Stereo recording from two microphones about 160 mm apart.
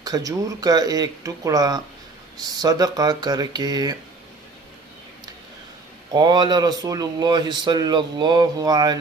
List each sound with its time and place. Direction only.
0.0 s speech: 25° right (ahead or behind)
6.1 s speech: 25° right (ahead or behind)